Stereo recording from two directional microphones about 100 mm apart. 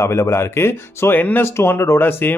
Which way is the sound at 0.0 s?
30° left (ahead or behind).